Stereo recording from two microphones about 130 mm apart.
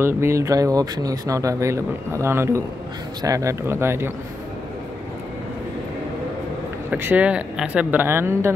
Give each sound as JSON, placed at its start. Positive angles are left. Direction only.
{"t": 0.0, "sound": "speech", "side_deg": -20}
{"t": 6.9, "sound": "speech", "side_deg": -15}